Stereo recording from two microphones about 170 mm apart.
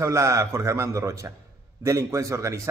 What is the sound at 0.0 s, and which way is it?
A man's voice, 20° right (ahead or behind).